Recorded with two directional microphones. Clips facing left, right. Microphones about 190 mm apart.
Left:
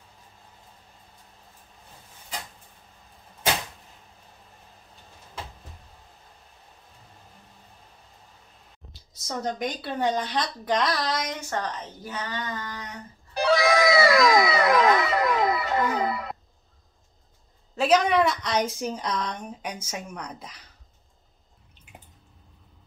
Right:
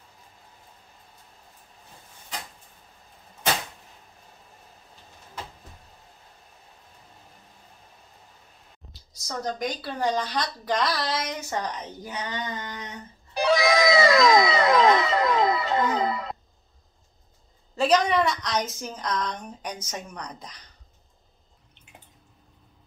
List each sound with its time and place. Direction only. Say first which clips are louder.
9.3 s speech: even; 5° left (ahead or behind); by 16.0 s 25° right (ahead or behind)
17.7 s a woman's voice: left 1 dB; 5° left (ahead or behind)